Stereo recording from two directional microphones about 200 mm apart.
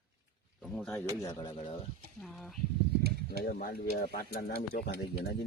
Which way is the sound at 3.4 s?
50° left (ahead or behind).